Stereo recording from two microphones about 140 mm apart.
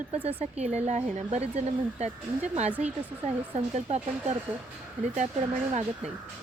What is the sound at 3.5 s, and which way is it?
Speech, 50° right (ahead or behind).